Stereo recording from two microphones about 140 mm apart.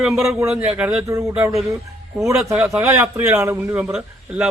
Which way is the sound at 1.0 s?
25° right (ahead or behind).